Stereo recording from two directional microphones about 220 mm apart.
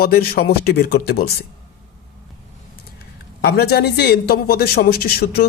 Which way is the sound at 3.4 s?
45° left (ahead or behind).